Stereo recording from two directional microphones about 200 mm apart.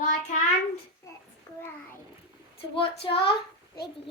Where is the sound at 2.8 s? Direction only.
25° left (ahead or behind).